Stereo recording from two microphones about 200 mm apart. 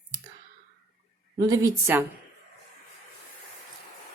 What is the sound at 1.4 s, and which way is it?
Speech, 15° right (ahead or behind).